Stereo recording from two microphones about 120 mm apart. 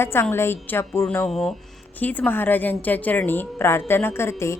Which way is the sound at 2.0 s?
15° left (ahead or behind).